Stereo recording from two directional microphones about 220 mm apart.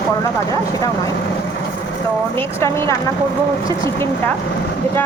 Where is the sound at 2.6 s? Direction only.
10° left (ahead or behind).